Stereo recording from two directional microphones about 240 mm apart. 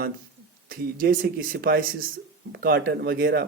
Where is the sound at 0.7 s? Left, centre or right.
Right.